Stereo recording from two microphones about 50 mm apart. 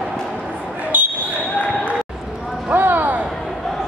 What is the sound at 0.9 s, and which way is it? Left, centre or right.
Basketball bounce, right.